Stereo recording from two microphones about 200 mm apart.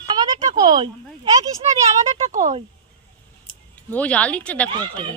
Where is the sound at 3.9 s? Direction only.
5° left (ahead or behind).